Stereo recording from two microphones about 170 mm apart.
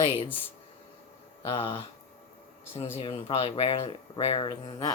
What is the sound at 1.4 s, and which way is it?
Speech, 30° left (ahead or behind).